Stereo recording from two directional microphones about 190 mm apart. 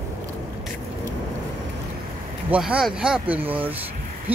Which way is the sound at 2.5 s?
5° right (ahead or behind).